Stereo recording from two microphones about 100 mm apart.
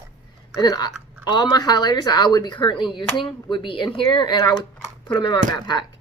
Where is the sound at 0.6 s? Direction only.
45° left (ahead or behind).